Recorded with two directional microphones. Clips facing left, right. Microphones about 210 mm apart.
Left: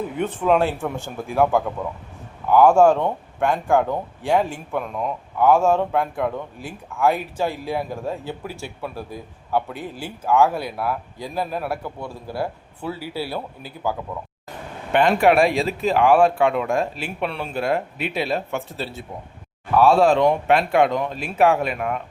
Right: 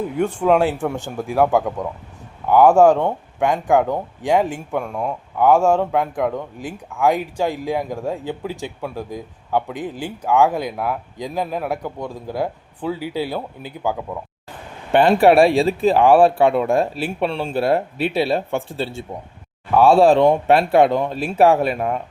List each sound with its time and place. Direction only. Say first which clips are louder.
0.3 s speech: right 2 dB; 10° right (ahead or behind)
14.9 s a man's voice: right 4 dB; 35° right (ahead or behind)